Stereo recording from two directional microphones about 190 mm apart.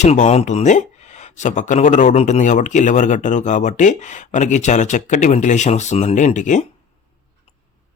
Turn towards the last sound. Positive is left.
turn(degrees=40)  # may be behind; listen again after turning